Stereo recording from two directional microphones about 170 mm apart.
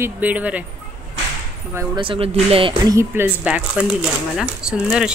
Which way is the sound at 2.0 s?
35° right (ahead or behind).